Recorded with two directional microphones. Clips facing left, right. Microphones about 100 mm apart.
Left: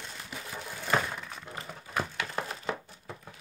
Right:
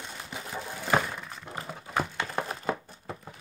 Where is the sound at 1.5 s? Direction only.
35° right (ahead or behind).